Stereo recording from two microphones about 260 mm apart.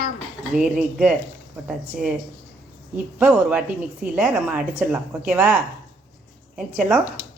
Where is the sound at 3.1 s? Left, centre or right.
Centre.